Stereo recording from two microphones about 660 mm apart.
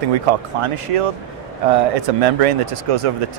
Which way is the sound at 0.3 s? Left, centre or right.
Right.